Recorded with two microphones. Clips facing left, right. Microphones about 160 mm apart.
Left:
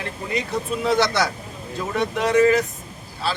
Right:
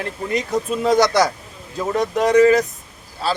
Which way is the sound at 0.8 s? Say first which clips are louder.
Right 5 dB; 40° right (ahead or behind).